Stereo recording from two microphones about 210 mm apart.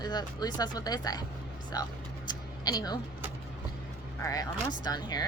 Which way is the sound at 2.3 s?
20° left (ahead or behind).